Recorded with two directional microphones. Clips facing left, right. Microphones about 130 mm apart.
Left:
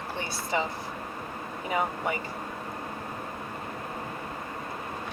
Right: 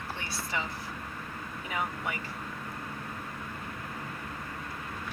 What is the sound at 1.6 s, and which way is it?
Speech, 35° left (ahead or behind).